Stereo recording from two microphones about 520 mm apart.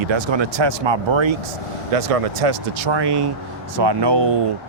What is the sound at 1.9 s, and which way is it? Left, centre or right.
Speech, right.